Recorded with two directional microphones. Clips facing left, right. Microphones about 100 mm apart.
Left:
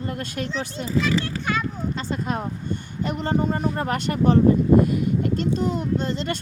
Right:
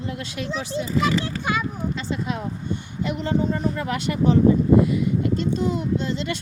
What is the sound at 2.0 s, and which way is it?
Speech, 45° left (ahead or behind).